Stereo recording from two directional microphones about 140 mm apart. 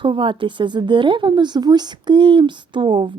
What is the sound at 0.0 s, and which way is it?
Speech, 35° right (ahead or behind).